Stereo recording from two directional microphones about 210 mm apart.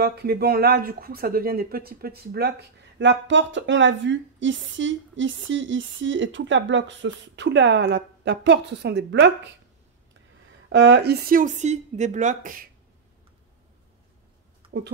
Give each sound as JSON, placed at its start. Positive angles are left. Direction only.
{"t": 0.0, "sound": "speech", "side_deg": -50}
{"t": 10.7, "sound": "a woman's voice", "side_deg": -55}
{"t": 14.6, "sound": "a sound", "side_deg": -25}